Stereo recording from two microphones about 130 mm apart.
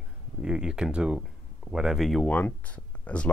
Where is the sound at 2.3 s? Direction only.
15° left (ahead or behind).